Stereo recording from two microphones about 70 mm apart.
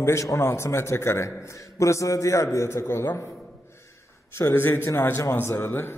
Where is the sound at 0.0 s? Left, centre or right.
Left.